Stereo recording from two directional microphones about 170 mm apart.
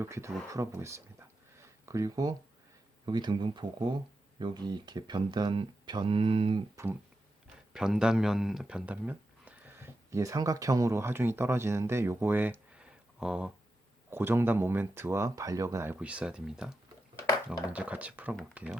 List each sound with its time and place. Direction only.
0.0 s speech: 15° right (ahead or behind)
1.5 s a sound: 20° right (ahead or behind)
3.1 s speech: 25° right (ahead or behind)
6.8 s speech: 20° right (ahead or behind)
7.7 s speech: 5° right (ahead or behind)